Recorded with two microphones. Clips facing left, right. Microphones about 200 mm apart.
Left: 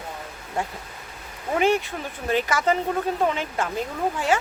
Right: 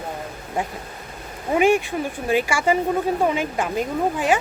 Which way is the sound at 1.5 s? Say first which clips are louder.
Right 4 dB; 15° right (ahead or behind).